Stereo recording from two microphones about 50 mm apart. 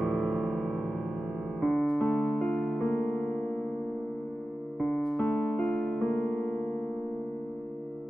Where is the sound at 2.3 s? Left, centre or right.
Centre.